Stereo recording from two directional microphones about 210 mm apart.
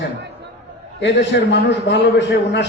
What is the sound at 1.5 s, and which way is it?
A man's voice, 55° left (ahead or behind).